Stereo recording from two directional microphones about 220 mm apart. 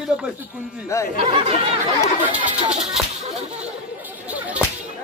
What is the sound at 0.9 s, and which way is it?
Speech, 15° left (ahead or behind).